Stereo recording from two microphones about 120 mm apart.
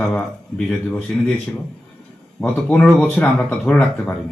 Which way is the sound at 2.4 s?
10° left (ahead or behind).